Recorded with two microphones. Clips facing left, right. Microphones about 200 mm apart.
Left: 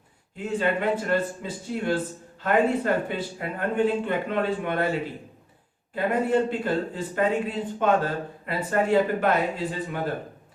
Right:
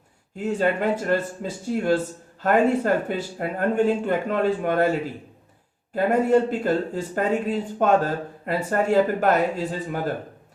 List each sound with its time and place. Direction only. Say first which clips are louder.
0.3 s speech: right 3 dB; 45° right (ahead or behind)